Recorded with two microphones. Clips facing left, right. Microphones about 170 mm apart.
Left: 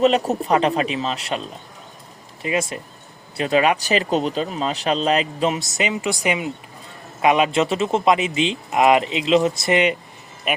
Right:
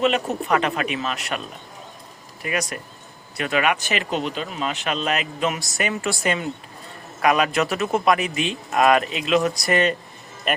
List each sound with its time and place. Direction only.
0.0 s speech: 35° left (ahead or behind)
2.4 s speech: 25° left (ahead or behind); by 10.6 s 10° left (ahead or behind)